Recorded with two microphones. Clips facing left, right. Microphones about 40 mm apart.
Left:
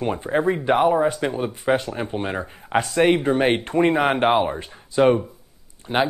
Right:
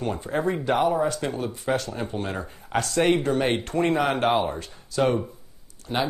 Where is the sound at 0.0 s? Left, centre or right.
Left.